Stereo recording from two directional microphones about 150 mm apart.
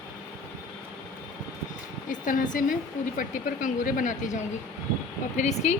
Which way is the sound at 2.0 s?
60° left (ahead or behind).